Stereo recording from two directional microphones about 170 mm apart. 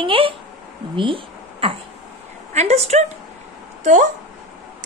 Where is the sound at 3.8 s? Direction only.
50° right (ahead or behind).